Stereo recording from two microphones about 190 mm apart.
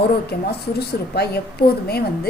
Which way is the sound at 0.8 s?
55° left (ahead or behind).